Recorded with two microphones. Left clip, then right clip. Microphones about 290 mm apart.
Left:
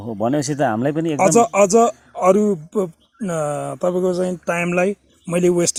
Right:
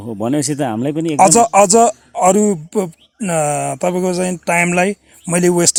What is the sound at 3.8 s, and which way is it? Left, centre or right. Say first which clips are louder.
Speech: right 2 dB; right.